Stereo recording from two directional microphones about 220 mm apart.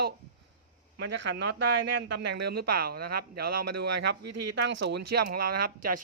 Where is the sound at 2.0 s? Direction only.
50° right (ahead or behind).